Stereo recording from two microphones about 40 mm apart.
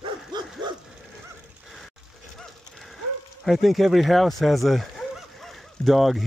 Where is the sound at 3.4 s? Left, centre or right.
Centre.